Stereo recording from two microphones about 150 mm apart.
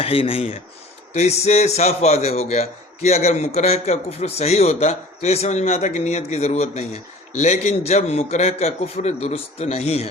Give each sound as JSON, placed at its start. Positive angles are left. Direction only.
{"t": 0.0, "sound": "a man's voice", "side_deg": 40}